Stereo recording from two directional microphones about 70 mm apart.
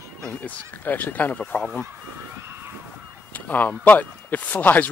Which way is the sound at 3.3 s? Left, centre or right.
Left.